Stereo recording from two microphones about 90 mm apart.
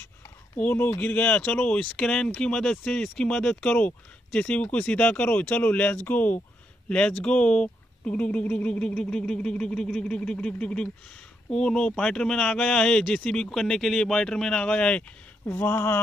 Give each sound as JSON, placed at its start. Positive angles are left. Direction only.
{"t": 0.6, "sound": "speech", "side_deg": 20}
{"t": 1.9, "sound": "speech", "side_deg": 5}
{"t": 15.5, "sound": "speech", "side_deg": 25}